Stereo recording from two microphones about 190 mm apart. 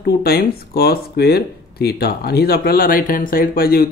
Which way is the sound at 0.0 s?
55° left (ahead or behind).